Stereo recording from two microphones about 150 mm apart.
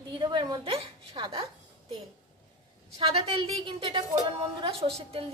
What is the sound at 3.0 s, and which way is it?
A woman's voice, 40° right (ahead or behind).